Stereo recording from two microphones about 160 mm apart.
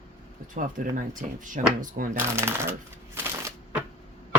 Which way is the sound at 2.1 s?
15° right (ahead or behind).